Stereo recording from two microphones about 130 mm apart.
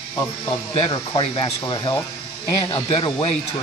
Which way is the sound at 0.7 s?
40° left (ahead or behind).